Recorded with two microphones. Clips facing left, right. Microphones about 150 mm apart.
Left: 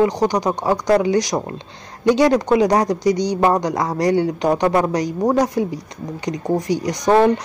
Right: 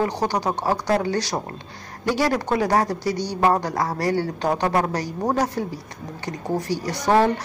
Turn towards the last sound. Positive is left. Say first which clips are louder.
# left 4 dB
turn(degrees=15)  # may be behind; listen again after turning